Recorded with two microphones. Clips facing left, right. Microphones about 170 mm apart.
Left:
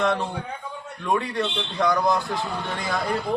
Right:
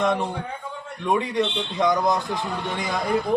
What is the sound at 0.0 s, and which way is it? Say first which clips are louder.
A man's voice: right 1 dB; 15° right (ahead or behind).